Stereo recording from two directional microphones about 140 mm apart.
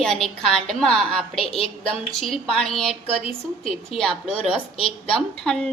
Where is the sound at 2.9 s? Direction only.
45° left (ahead or behind).